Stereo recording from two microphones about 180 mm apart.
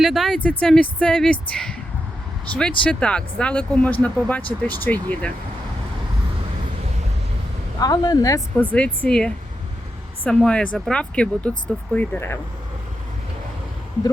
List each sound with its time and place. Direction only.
0.0 s speech: centre (ahead or behind)
7.8 s speech: 20° left (ahead or behind)
8.7 s speech: 5° left (ahead or behind)